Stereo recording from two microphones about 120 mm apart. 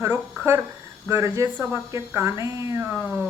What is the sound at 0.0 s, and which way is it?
A woman's voice, 15° right (ahead or behind).